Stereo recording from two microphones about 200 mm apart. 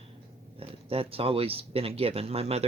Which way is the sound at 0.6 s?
30° right (ahead or behind).